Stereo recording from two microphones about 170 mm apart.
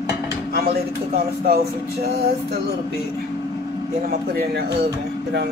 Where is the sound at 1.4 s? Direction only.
70° right (ahead or behind).